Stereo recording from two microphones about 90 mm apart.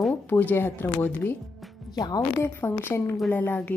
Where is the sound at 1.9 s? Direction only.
45° left (ahead or behind).